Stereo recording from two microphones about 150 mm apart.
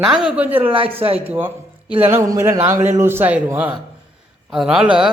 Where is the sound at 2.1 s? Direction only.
20° right (ahead or behind); by 4.9 s 5° right (ahead or behind).